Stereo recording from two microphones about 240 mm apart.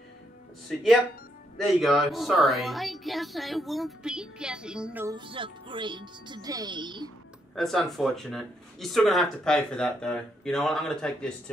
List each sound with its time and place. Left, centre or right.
1.6 s speech: centre
5.1 s speech: right
7.5 s speech: centre